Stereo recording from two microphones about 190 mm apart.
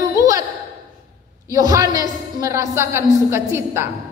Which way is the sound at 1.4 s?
20° right (ahead or behind).